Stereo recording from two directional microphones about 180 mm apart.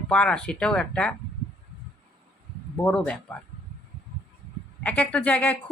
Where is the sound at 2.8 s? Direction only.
5° left (ahead or behind).